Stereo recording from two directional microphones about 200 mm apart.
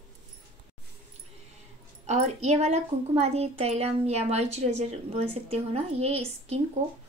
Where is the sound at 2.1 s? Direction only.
35° right (ahead or behind).